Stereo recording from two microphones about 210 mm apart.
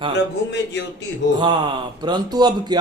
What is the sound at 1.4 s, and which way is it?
Speech, 20° right (ahead or behind).